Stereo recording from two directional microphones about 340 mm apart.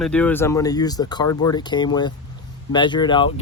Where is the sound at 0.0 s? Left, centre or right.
Centre.